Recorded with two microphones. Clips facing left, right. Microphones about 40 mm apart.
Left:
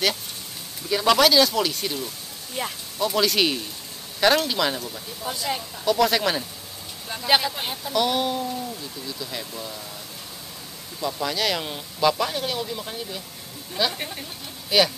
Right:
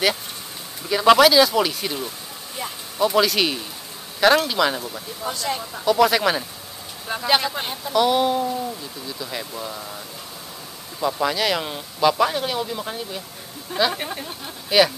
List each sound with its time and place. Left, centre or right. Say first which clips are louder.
1.0 s speech: right 4 dB; centre
3.0 s a man's voice: right 3 dB; centre
5.3 s a man's voice: right 1 dB; centre
11.0 s speech: right 5 dB; centre
11.3 s speech: right 3 dB; centre